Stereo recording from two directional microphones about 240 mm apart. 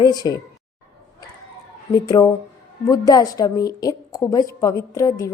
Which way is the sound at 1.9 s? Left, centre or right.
Centre.